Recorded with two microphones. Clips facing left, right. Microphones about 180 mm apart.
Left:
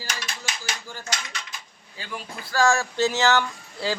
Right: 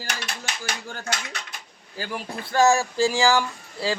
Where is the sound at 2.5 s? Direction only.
20° right (ahead or behind).